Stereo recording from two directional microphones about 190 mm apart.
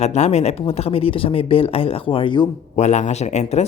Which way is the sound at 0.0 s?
35° left (ahead or behind).